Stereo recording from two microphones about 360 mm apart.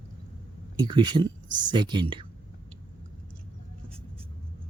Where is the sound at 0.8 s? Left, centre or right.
Centre.